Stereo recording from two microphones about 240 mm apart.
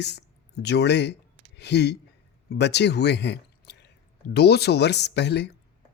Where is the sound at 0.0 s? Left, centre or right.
Left.